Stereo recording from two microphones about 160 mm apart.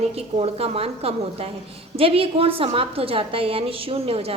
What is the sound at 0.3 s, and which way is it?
A woman's voice, 40° right (ahead or behind).